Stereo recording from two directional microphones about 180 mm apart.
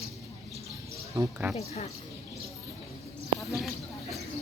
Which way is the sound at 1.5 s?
35° left (ahead or behind).